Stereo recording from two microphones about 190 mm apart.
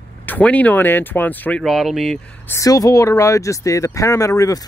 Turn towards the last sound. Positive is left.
turn(degrees=20)  # may be behind; listen again after turning